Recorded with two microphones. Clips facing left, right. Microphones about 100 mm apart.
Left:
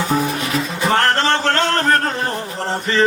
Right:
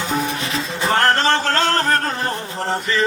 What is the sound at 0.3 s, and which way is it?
Music, 30° right (ahead or behind).